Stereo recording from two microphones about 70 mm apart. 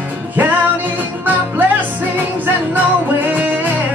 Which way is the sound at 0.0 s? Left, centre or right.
Right.